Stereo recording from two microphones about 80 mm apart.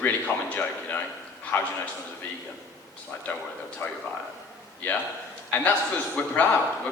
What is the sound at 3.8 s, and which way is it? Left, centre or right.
Speech, left.